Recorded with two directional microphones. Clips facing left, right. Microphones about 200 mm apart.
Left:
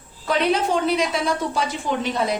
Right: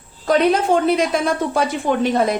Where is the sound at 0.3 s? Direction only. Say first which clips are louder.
Right 5 dB; 50° right (ahead or behind).